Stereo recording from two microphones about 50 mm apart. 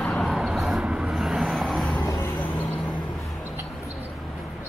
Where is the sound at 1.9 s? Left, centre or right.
Left.